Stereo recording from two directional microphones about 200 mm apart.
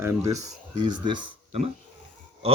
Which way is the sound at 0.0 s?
15° right (ahead or behind).